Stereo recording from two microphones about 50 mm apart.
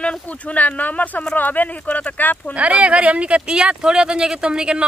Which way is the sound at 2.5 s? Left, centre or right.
Right.